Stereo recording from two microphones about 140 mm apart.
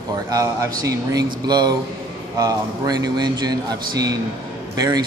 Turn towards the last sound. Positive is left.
turn(degrees=-25)  # may be behind; listen again after turning